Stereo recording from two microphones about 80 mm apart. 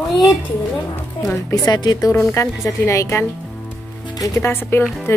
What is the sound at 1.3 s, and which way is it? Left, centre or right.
Speech, left.